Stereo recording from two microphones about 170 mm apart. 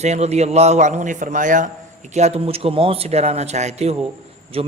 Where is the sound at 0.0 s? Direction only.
40° right (ahead or behind).